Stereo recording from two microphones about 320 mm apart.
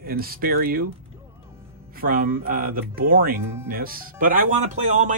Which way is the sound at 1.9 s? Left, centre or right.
Right.